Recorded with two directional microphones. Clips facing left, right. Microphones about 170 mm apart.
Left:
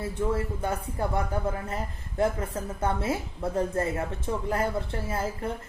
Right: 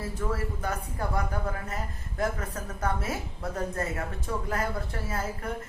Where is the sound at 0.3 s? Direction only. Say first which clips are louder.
Left 3 dB; 25° left (ahead or behind).